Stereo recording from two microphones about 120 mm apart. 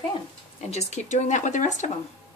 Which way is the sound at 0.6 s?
65° left (ahead or behind).